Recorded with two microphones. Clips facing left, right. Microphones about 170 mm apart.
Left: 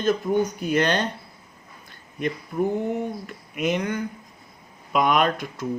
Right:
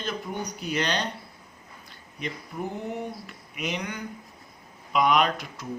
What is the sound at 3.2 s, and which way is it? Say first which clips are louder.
Speech: left 8 dB; 50° left (ahead or behind).